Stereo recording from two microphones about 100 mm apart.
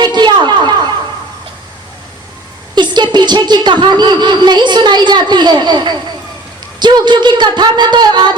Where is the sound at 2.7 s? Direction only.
50° right (ahead or behind).